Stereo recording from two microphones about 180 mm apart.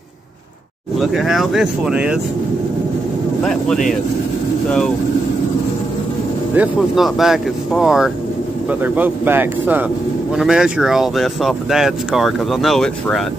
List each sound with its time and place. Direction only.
0.9 s speech: centre (ahead or behind)
3.4 s speech: centre (ahead or behind)
6.5 s speech: 5° right (ahead or behind)